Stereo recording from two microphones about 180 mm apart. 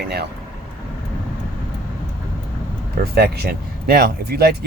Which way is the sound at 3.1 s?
60° right (ahead or behind).